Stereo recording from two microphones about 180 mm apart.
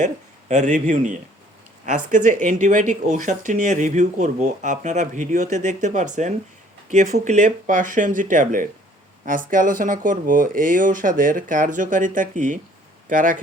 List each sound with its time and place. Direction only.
0.0 s speech: 40° right (ahead or behind)